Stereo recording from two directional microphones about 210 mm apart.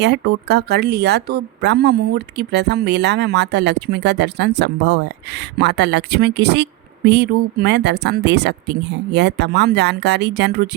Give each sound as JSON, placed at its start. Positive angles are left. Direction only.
{"t": 0.0, "sound": "speech", "side_deg": -55}